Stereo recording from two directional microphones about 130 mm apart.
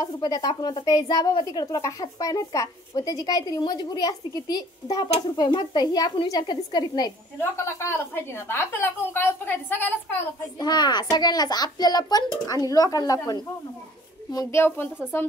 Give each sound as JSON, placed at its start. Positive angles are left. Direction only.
{"t": 0.0, "sound": "a woman's voice", "side_deg": 30}
{"t": 7.3, "sound": "a woman's voice", "side_deg": 20}
{"t": 10.6, "sound": "a woman's voice", "side_deg": 35}